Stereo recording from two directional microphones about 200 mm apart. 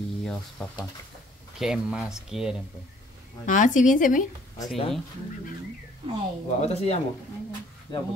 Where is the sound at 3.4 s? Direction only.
40° left (ahead or behind).